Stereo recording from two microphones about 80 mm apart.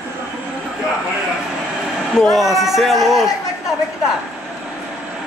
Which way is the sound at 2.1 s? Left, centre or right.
Centre.